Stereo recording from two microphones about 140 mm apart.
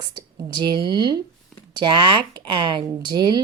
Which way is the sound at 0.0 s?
25° right (ahead or behind).